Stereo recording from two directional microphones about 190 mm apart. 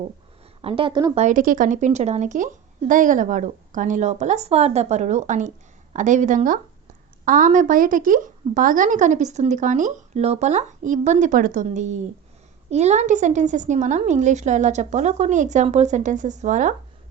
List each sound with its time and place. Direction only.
0.6 s a woman's voice: 30° right (ahead or behind)
1.1 s a woman's voice: 40° right (ahead or behind)